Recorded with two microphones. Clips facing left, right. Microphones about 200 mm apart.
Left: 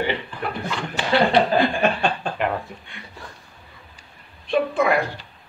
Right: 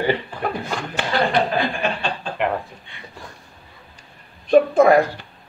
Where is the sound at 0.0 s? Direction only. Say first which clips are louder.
Right 4 dB; 40° right (ahead or behind).